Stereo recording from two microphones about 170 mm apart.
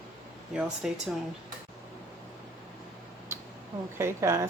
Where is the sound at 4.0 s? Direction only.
15° right (ahead or behind).